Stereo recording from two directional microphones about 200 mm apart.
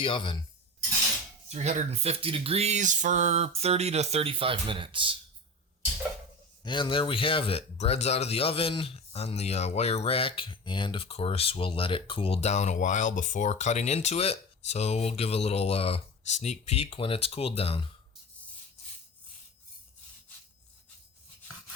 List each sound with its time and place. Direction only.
0.0 s speech: 25° left (ahead or behind)
1.5 s speech: 35° right (ahead or behind)
6.7 s speech: 25° left (ahead or behind)